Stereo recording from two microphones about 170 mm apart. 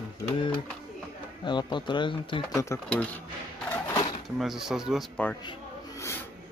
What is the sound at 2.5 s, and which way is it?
Speech, 15° left (ahead or behind).